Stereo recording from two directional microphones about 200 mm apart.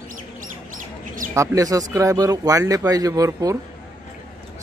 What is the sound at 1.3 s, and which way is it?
Speech, 15° right (ahead or behind).